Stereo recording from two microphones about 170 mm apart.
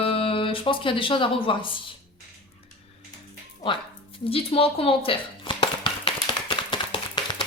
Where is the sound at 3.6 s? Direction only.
30° left (ahead or behind).